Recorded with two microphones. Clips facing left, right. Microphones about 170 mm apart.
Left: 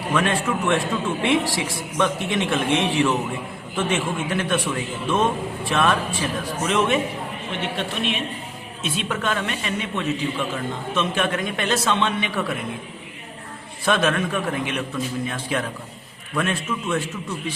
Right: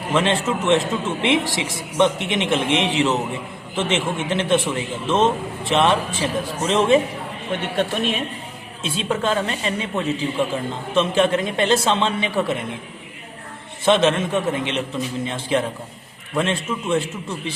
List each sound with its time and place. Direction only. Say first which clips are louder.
0.1 s a woman's voice: right 2 dB; 25° right (ahead or behind)
7.8 s a woman's voice: right 7 dB; 45° right (ahead or behind)
8.8 s a woman's voice: right 3 dB; 30° right (ahead or behind)
13.8 s a woman's voice: right 4 dB; 25° right (ahead or behind)